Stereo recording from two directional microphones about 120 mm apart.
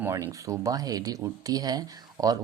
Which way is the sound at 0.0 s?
25° right (ahead or behind).